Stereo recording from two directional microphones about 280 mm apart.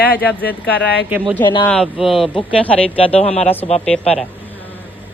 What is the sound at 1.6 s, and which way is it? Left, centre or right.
Speech, centre.